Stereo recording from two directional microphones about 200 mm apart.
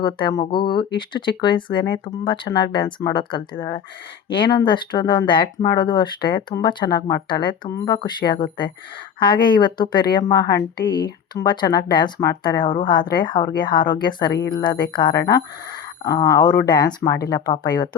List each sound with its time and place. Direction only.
0.0 s a woman's voice: 20° left (ahead or behind)